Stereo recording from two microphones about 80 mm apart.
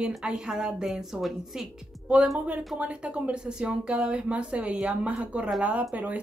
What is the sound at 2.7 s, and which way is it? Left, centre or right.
Speech, centre.